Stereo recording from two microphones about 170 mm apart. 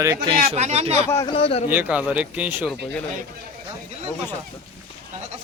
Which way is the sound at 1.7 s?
10° right (ahead or behind).